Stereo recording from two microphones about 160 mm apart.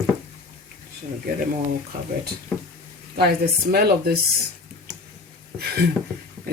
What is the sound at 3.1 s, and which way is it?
Speech, 80° right.